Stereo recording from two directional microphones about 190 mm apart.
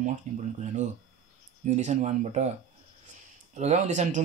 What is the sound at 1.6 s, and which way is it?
Speech, 40° right (ahead or behind).